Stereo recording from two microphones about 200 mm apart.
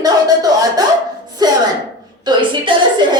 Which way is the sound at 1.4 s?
20° right (ahead or behind).